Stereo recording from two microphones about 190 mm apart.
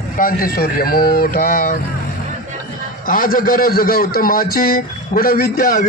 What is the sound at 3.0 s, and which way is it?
A man's voice, 45° left (ahead or behind).